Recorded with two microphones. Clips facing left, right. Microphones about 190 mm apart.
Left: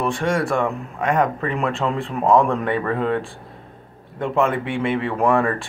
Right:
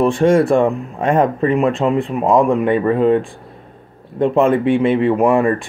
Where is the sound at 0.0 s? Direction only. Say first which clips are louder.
Right 9 dB; 25° right (ahead or behind).